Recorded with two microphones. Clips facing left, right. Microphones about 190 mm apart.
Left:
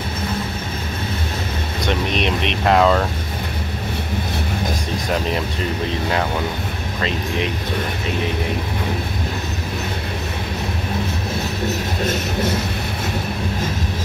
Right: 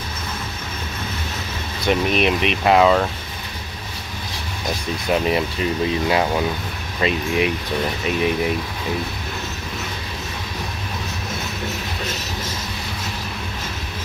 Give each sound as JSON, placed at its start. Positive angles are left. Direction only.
{"t": 1.9, "sound": "speech", "side_deg": -5}
{"t": 7.0, "sound": "speech", "side_deg": -10}